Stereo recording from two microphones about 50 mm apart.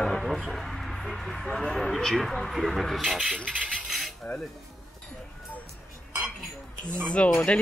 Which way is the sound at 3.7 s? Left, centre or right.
Centre.